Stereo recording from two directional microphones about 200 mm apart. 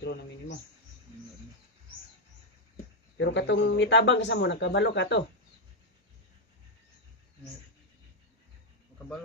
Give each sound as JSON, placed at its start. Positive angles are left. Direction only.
{"t": 0.0, "sound": "bird", "side_deg": 60}
{"t": 3.2, "sound": "speech", "side_deg": 60}